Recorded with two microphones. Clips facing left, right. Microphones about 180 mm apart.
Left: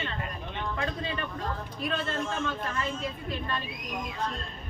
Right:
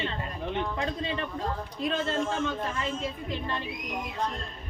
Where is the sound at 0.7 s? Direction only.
25° right (ahead or behind).